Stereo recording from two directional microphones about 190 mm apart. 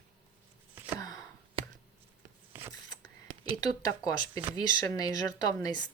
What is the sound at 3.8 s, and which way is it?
A woman's voice, 20° left (ahead or behind).